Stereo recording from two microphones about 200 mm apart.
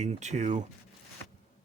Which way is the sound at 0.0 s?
35° right (ahead or behind).